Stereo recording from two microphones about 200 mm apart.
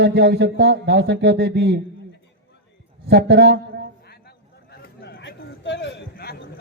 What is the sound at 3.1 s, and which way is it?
Speech, 55° right (ahead or behind).